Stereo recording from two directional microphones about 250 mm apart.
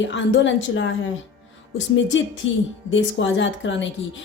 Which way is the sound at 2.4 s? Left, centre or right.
Left.